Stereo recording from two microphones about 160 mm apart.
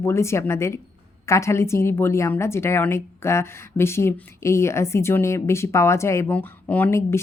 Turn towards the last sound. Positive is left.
turn(degrees=15)  # may be behind; listen again after turning